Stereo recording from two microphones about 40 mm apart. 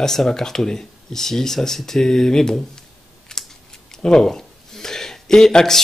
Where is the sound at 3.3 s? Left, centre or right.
Centre.